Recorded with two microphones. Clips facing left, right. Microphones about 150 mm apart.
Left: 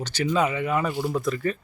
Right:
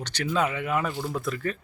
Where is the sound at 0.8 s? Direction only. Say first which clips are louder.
Left 4 dB; 15° left (ahead or behind).